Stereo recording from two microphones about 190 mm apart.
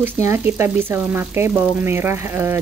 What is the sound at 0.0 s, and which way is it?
Frying, 15° right (ahead or behind).